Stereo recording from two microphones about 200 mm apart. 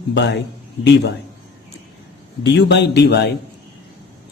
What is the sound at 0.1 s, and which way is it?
Speech, 60° left (ahead or behind).